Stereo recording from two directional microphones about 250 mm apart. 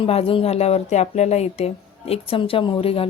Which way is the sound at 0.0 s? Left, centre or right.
Left.